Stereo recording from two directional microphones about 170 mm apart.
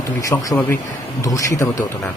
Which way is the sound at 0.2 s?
20° left (ahead or behind).